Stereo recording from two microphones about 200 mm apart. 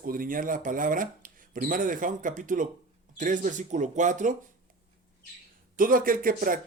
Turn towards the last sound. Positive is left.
turn(degrees=-45)  # may be behind; listen again after turning